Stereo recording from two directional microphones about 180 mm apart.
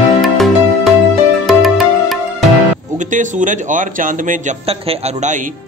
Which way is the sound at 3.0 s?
45° right (ahead or behind).